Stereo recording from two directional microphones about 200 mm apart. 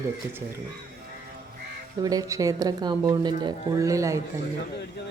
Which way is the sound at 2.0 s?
20° right (ahead or behind).